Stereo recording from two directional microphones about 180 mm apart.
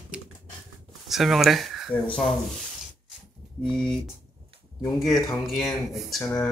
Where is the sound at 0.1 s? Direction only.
5° right (ahead or behind).